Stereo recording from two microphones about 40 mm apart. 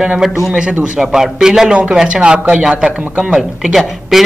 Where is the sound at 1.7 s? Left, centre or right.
Right.